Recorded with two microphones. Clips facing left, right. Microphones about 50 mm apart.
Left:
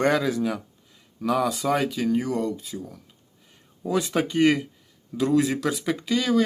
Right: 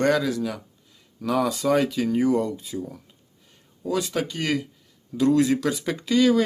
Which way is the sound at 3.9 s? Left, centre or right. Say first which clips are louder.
Left 4 dB; left.